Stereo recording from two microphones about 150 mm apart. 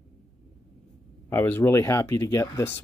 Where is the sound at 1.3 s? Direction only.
15° left (ahead or behind).